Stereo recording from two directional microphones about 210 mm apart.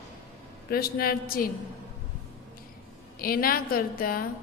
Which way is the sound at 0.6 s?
45° left (ahead or behind).